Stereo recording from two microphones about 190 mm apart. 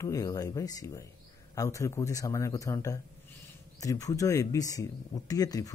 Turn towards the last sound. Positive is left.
turn(degrees=20)  # may be behind; listen again after turning